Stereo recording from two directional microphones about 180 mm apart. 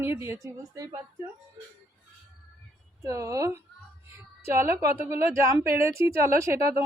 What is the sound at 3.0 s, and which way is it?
Speech, 15° right (ahead or behind).